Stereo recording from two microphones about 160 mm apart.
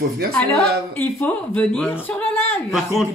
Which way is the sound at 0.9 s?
10° left (ahead or behind).